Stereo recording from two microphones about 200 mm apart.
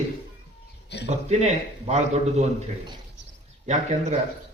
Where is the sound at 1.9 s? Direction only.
35° right (ahead or behind).